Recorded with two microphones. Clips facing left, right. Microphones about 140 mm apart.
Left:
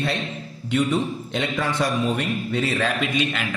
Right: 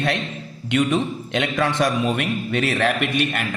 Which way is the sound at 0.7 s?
85° right.